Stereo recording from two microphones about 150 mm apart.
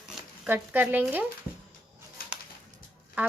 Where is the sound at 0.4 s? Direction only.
10° right (ahead or behind).